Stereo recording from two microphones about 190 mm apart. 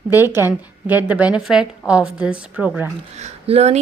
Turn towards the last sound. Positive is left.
turn(degrees=-35)  # may be behind; listen again after turning